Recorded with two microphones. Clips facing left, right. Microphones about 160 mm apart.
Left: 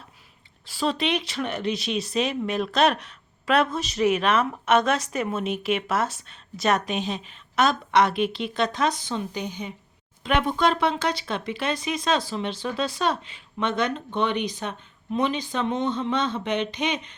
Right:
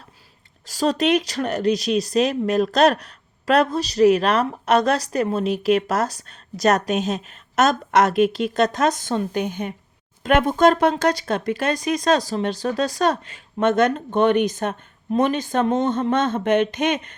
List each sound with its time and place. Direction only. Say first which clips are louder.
0.6 s speech: right 5 dB; 40° right (ahead or behind)